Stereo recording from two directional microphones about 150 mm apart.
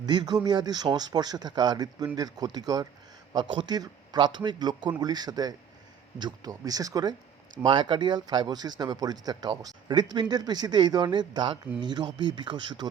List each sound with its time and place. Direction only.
0.0 s speech: 30° right (ahead or behind)